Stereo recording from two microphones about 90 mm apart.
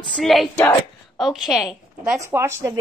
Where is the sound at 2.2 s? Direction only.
30° right (ahead or behind).